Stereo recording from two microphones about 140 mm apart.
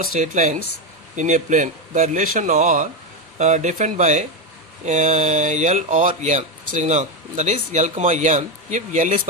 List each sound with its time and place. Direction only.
0.0 s speech: 60° right (ahead or behind)